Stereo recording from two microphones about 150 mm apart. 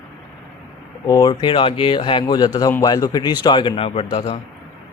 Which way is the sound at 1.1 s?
25° left (ahead or behind).